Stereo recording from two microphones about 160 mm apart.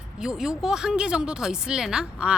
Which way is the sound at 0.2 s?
5° right (ahead or behind).